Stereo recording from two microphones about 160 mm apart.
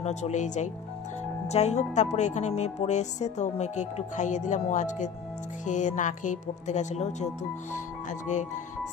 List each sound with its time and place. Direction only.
0.0 s music: 45° left (ahead or behind)